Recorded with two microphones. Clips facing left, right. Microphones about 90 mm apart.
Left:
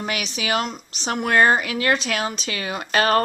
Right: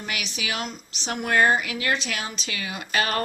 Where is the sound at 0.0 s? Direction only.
50° left (ahead or behind).